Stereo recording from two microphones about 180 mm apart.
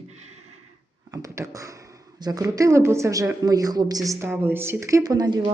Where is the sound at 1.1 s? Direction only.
20° right (ahead or behind).